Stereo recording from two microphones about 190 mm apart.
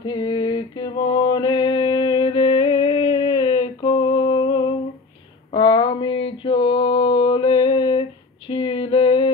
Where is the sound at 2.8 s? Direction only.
30° left (ahead or behind).